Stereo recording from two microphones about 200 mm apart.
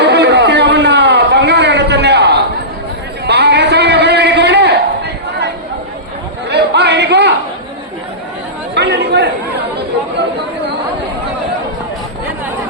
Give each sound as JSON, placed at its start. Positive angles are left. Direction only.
{"t": 0.0, "sound": "a sound", "side_deg": -60}
{"t": 6.5, "sound": "chatter", "side_deg": -55}
{"t": 8.7, "sound": "chatter", "side_deg": -60}